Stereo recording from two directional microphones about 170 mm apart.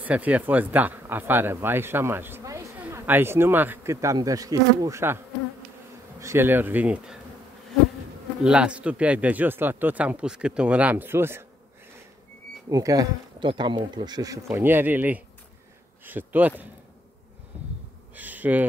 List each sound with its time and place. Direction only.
0.0 s speech: 10° right (ahead or behind)
8.5 s speech: 5° right (ahead or behind)
12.6 s speech: 20° right (ahead or behind)
18.1 s a sound: 10° right (ahead or behind)